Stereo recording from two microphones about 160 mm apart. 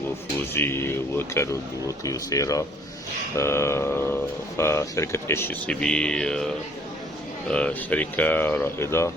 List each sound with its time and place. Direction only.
0.3 s speech: 15° left (ahead or behind)
7.5 s speech: 10° left (ahead or behind)